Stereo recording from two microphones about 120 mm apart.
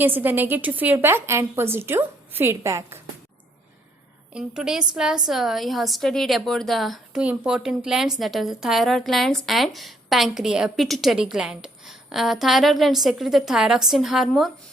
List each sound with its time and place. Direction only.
0.0 s a woman's voice: 15° right (ahead or behind)
4.4 s a woman's voice: 5° right (ahead or behind)